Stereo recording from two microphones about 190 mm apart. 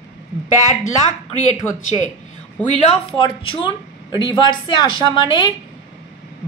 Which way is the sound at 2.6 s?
25° left (ahead or behind).